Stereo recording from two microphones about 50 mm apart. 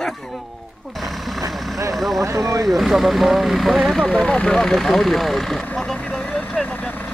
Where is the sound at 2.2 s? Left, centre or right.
Right.